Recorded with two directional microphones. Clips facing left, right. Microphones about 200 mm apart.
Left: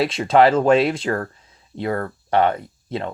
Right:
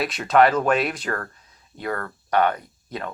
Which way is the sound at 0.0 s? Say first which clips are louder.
Left 3 dB; 25° left (ahead or behind).